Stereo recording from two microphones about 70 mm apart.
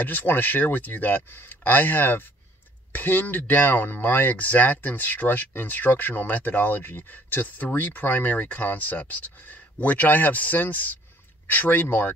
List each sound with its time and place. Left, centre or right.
0.0 s speech: left